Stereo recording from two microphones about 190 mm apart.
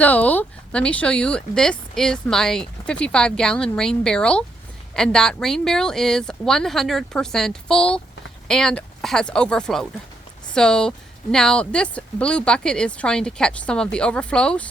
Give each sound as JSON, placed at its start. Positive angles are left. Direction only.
{"t": 0.0, "sound": "speech", "side_deg": 10}